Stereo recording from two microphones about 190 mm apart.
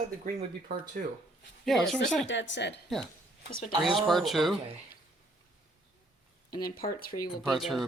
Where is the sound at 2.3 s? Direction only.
70° left (ahead or behind).